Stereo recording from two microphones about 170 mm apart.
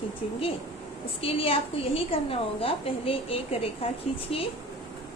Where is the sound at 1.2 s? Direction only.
35° left (ahead or behind).